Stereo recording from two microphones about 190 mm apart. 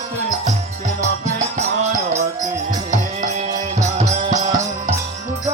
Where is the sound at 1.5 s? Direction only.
40° right (ahead or behind).